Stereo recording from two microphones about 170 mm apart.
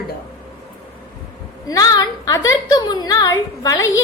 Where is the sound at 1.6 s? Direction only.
20° left (ahead or behind).